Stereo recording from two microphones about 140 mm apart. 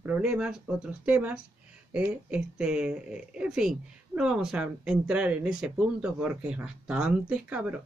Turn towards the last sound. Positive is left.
turn(degrees=-10)  # may be behind; listen again after turning